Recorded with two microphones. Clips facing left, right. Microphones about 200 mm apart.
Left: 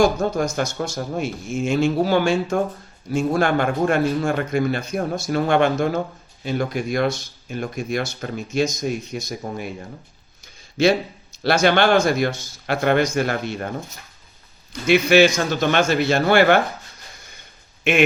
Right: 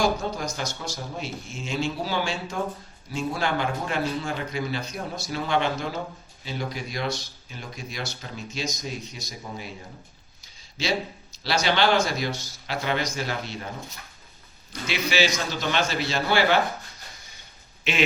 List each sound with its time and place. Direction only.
0.2 s speech: 50° left (ahead or behind)
10.4 s a sound: 55° left (ahead or behind)
11.4 s speech: 55° left (ahead or behind)
14.7 s speech: 55° left (ahead or behind)
17.9 s speech: 50° left (ahead or behind)